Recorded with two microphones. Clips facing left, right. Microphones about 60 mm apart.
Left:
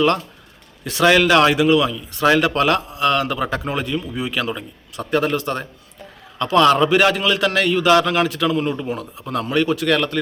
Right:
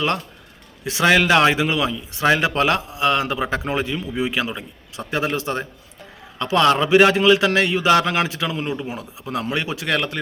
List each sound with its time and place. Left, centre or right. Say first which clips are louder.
0.9 s a man's voice: left 2 dB; centre
6.4 s a man's voice: left 3 dB; centre